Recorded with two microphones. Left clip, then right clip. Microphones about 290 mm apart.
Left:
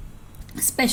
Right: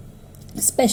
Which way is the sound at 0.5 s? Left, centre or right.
Left.